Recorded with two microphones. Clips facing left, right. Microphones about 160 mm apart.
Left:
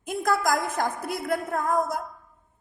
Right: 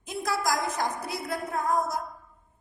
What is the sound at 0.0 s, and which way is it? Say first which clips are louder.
A woman's voice: left 4 dB; 50° left (ahead or behind).